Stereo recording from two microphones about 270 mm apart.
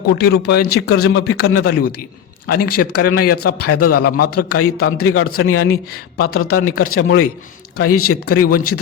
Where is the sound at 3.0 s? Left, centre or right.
Left.